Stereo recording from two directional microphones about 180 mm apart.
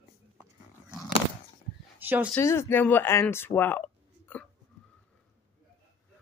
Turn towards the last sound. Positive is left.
turn(degrees=10)  # may be behind; listen again after turning